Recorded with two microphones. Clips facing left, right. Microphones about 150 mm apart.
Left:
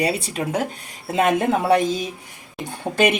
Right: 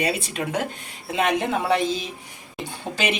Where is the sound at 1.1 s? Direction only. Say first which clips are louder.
Left 4 dB; 50° left (ahead or behind).